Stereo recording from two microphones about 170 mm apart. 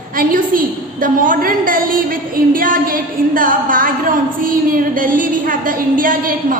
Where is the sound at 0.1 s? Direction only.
55° right (ahead or behind).